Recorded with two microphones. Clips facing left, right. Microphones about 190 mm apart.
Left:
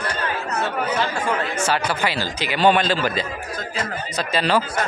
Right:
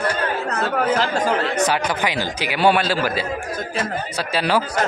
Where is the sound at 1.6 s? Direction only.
15° right (ahead or behind).